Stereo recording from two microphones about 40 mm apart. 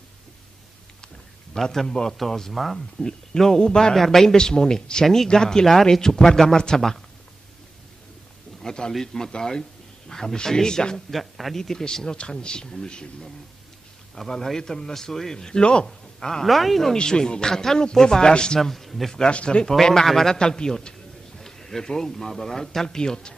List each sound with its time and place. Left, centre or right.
1.6 s a man's voice: centre
3.0 s a man's voice: centre
3.9 s a man's voice: centre
5.0 s a man's voice: centre
8.6 s a sound: left
9.0 s a man's voice: centre
11.1 s a man's voice: centre
16.4 s speech: centre
16.9 s a man's voice: centre
18.6 s speech: centre
19.3 s a man's voice: left
19.7 s a man's voice: centre